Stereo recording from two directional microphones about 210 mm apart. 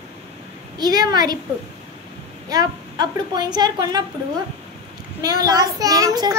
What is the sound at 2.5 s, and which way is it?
A woman's voice, 20° right (ahead or behind).